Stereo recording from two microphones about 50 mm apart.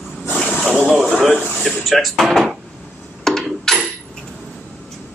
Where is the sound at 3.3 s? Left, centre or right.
Centre.